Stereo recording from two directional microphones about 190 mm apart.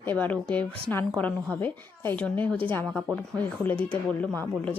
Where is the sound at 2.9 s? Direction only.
Centre (ahead or behind).